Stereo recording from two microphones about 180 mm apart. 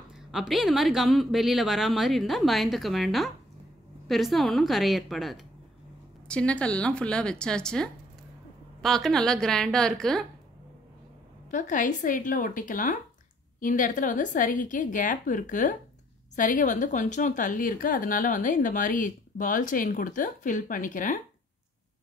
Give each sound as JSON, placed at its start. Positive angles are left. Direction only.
{"t": 0.1, "sound": "speech", "side_deg": 0}
{"t": 11.5, "sound": "a woman's voice", "side_deg": 45}